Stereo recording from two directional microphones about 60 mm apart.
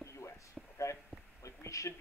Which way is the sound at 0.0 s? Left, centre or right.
Left.